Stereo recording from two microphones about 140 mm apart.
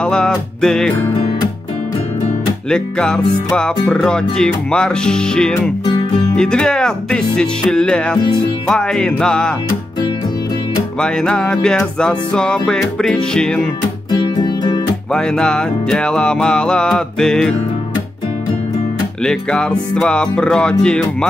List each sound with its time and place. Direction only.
0.0 s music: 5° left (ahead or behind)
2.7 s music: 5° left (ahead or behind)
11.0 s music: 5° left (ahead or behind)
14.2 s music: 30° left (ahead or behind)
15.1 s music: 5° left (ahead or behind)
19.2 s music: 5° left (ahead or behind)